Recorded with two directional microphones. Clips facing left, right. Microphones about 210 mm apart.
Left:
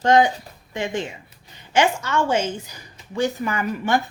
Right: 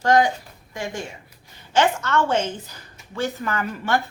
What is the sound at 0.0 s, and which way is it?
A woman's voice, 20° left (ahead or behind).